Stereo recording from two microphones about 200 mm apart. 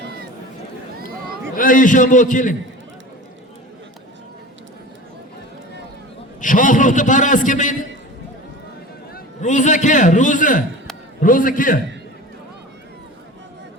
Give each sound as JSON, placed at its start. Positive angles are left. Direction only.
{"t": 1.5, "sound": "a man's voice", "side_deg": 40}
{"t": 6.4, "sound": "a man's voice", "side_deg": 40}
{"t": 9.1, "sound": "a man's voice", "side_deg": 40}